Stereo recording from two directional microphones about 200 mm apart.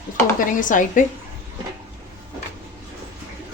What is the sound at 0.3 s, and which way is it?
Speech, 40° left (ahead or behind).